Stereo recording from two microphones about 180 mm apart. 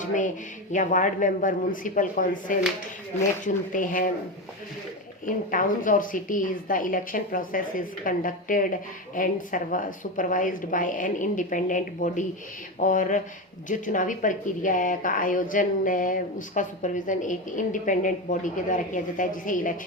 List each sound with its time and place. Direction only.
0.0 s a woman's voice: 45° left (ahead or behind)
5.2 s a woman's voice: 50° left (ahead or behind)